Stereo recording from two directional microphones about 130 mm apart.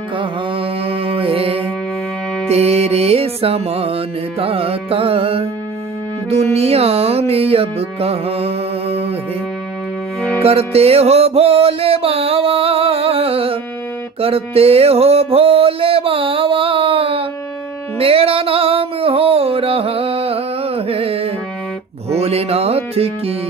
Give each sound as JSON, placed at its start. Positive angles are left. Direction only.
{"t": 0.2, "sound": "music", "side_deg": -45}
{"t": 10.4, "sound": "music", "side_deg": -50}